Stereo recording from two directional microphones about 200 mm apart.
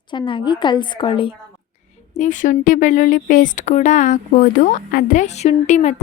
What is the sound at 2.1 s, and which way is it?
Speech, 40° left (ahead or behind).